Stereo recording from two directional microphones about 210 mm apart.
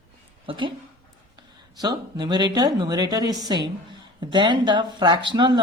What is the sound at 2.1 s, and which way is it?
A woman's voice, 20° right (ahead or behind).